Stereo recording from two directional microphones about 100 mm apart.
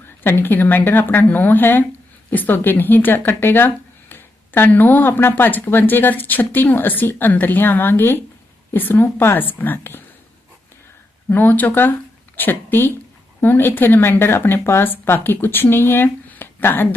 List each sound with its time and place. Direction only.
0.0 s speech: 20° left (ahead or behind)
11.3 s speech: 20° left (ahead or behind)